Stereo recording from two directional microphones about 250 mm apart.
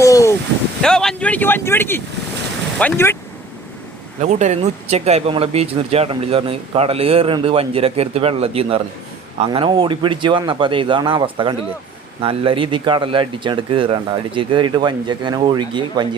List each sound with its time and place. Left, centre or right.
0.0 s a sound: centre
0.8 s speech: centre
4.2 s speech: right